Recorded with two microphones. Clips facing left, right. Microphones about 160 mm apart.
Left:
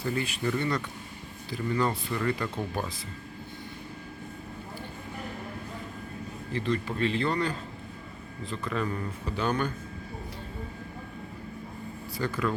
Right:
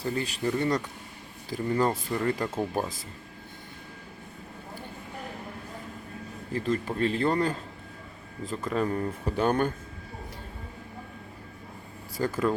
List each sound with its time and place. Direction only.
0.0 s speech: 35° right (ahead or behind)
6.5 s speech: 45° right (ahead or behind)
12.1 s speech: 40° right (ahead or behind)